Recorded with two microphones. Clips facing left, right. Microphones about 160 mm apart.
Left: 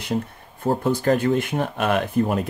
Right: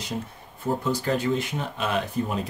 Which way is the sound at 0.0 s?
55° left (ahead or behind).